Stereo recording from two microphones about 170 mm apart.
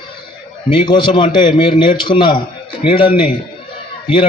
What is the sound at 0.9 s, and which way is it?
A man's voice, 30° left (ahead or behind).